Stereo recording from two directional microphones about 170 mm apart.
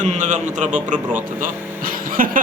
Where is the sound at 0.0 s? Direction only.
45° right (ahead or behind).